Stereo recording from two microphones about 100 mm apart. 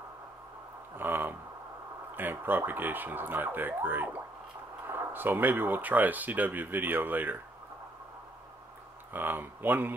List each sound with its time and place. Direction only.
0.9 s speech: 20° right (ahead or behind)
9.1 s speech: 20° right (ahead or behind)